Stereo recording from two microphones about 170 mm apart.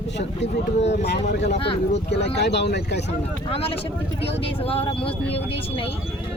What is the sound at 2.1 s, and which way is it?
Speech, 80° left.